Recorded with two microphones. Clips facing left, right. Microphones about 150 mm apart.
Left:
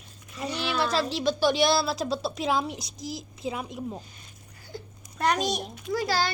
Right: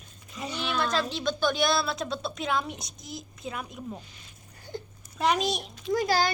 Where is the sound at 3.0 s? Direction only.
90° left.